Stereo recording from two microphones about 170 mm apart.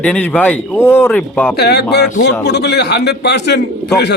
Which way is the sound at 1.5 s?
70° left (ahead or behind).